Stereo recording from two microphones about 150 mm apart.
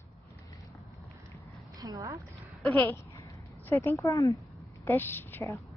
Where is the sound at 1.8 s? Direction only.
20° right (ahead or behind).